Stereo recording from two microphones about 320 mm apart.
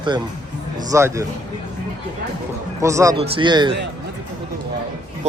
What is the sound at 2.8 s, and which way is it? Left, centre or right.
Speech, centre.